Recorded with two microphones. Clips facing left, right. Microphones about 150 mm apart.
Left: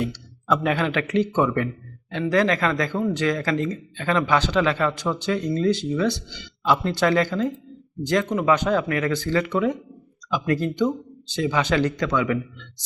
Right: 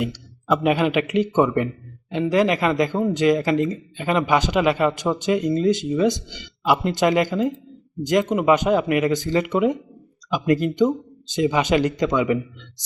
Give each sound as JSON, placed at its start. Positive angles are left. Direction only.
{"t": 0.0, "sound": "speech", "side_deg": -15}